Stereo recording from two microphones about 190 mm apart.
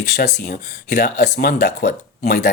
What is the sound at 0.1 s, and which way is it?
Speech, 55° left (ahead or behind).